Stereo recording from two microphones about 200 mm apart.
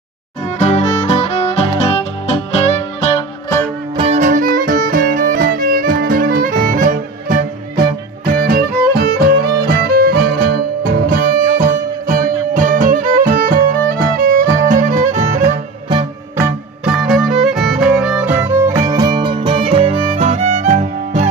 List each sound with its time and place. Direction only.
0.6 s music: 35° left (ahead or behind)
3.4 s music: 10° left (ahead or behind)
3.9 s music: 30° right (ahead or behind)
15.9 s music: 20° right (ahead or behind)
16.8 s music: centre (ahead or behind); by 21.3 s 35° right (ahead or behind)